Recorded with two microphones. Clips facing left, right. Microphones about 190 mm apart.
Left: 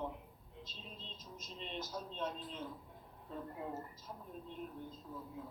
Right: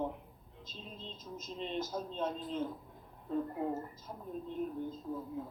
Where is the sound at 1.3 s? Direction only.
45° right (ahead or behind).